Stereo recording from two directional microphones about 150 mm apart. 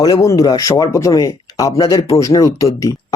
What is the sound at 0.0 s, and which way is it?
Speech, 25° left (ahead or behind).